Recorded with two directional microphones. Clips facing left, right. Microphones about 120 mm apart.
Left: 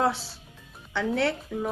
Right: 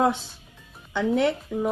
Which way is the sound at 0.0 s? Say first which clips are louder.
Right 3 dB; 20° right (ahead or behind).